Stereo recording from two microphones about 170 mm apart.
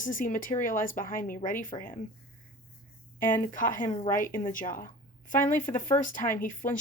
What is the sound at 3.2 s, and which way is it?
A woman's voice, 50° left (ahead or behind).